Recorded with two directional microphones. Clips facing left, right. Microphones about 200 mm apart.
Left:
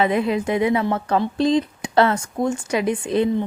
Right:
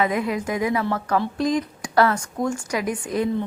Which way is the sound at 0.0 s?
25° left (ahead or behind).